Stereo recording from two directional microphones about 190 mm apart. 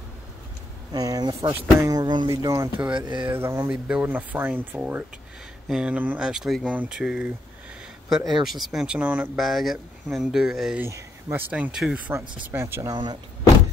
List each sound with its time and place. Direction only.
0.9 s speech: 20° right (ahead or behind)
3.3 s speech: 15° right (ahead or behind)
10.9 s speech: 15° right (ahead or behind)